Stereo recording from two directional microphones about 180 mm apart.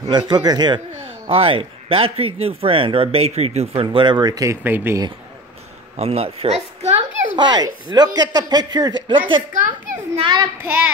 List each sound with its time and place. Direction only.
0.1 s a man's voice: 25° right (ahead or behind)
5.9 s a child's voice: 35° right (ahead or behind)
7.3 s a man's voice: 25° right (ahead or behind)
9.5 s a child's voice: 45° right (ahead or behind)
10.2 s a man's voice: 25° right (ahead or behind)